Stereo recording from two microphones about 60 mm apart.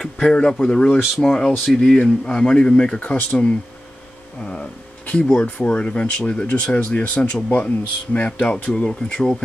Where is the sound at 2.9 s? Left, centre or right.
Left.